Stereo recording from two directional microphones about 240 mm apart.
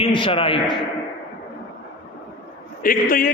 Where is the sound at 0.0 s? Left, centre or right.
Left.